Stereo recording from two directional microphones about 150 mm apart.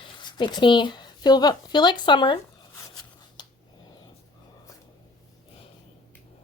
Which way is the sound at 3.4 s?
30° left (ahead or behind).